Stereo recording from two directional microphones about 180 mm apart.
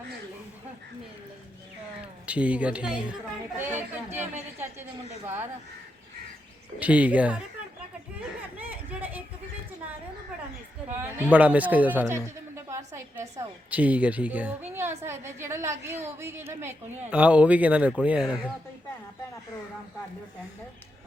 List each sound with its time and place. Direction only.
2.2 s a woman's voice: 5° right (ahead or behind)
6.7 s a woman's voice: 10° right (ahead or behind)
8.5 s a sound: 10° right (ahead or behind)
11.0 s a woman's voice: 10° right (ahead or behind)